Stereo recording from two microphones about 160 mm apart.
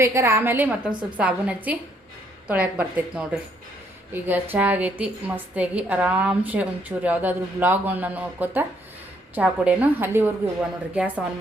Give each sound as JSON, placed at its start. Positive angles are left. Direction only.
{"t": 0.0, "sound": "a woman's voice", "side_deg": -15}